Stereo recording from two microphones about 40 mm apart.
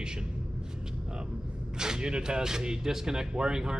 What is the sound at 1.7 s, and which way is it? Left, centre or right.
Speech, centre.